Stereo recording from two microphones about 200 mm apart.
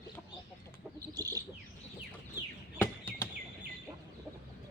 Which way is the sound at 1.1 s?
20° right (ahead or behind).